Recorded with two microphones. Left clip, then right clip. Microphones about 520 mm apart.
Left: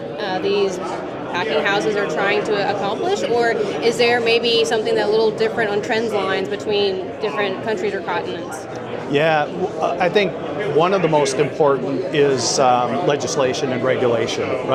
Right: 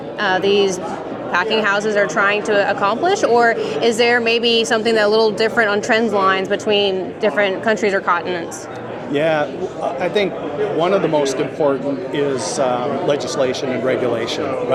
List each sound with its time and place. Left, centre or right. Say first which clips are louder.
0.2 s speech: right 5 dB; right
9.1 s a man's voice: even; left